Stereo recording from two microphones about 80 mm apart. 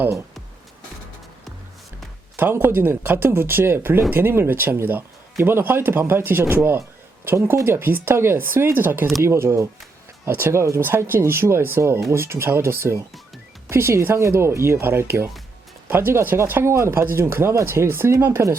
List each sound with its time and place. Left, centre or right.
2.3 s speech: right